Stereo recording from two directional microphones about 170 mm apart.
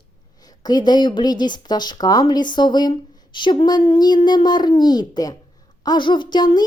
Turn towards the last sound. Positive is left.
turn(degrees=25)  # may be behind; listen again after turning